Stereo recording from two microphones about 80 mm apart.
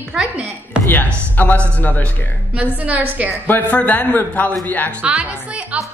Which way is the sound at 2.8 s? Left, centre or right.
Centre.